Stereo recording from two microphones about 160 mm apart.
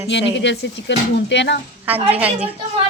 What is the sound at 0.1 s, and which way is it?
Speech, 90° left.